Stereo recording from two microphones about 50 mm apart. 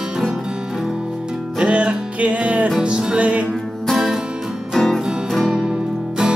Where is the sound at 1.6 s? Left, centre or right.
Right.